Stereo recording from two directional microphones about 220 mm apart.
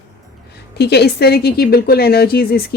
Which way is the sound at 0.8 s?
50° left (ahead or behind).